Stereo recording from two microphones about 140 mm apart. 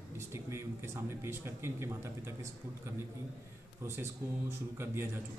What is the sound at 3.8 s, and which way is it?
Speech, 20° right (ahead or behind).